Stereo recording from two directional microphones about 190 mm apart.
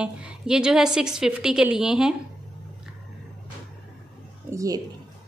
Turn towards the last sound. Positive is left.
turn(degrees=-15)  # may be behind; listen again after turning